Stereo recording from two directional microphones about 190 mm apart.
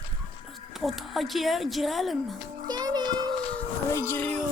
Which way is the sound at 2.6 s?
20° right (ahead or behind).